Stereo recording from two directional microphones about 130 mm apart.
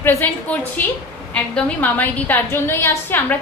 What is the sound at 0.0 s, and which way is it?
Speech, 15° left (ahead or behind).